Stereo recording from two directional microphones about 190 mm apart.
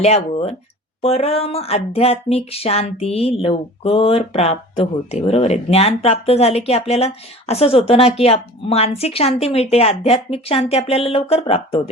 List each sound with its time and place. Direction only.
0.0 s speech: 35° left (ahead or behind)